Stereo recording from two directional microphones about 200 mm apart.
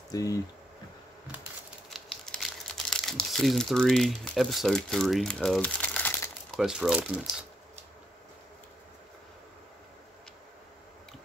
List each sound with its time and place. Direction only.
0.1 s speech: 15° left (ahead or behind)
2.0 s crumpling: centre (ahead or behind)
6.6 s speech: 5° right (ahead or behind)